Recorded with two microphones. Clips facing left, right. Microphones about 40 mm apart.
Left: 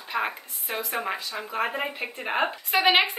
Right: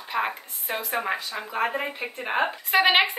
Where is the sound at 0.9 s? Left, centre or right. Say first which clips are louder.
Right 3 dB; centre.